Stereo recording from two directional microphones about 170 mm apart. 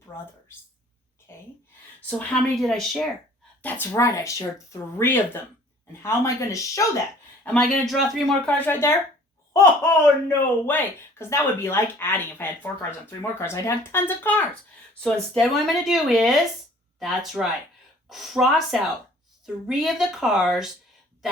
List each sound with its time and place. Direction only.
1.3 s a sound: 15° left (ahead or behind)
2.0 s speech: 10° left (ahead or behind)
3.6 s speech: 10° left (ahead or behind)
7.4 s speech: 5° left (ahead or behind)